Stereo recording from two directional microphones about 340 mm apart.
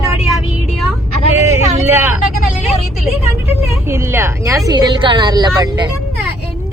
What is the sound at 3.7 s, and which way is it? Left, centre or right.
Speech, centre.